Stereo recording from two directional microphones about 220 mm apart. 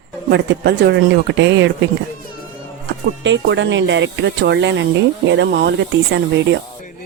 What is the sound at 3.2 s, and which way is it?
Speech, 55° right (ahead or behind).